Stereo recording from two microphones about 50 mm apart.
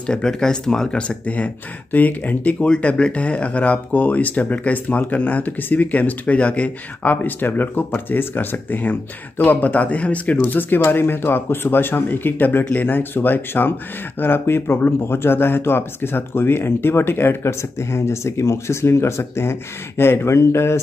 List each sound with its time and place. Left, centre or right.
0.0 s speech: centre
1.0 s speech: left
10.4 s speech: left
17.4 s speech: left